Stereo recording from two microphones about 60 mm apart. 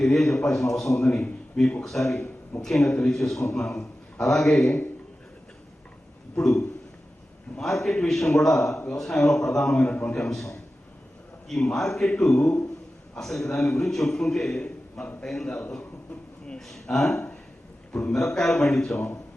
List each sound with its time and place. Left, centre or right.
0.0 s a man's voice: centre
6.3 s a man's voice: centre
9.9 s a man's voice: left
10.2 s a man's voice: centre
14.6 s a sound: centre
15.2 s a man's voice: centre